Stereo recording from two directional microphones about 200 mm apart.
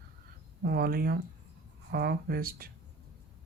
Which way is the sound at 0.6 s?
50° right (ahead or behind).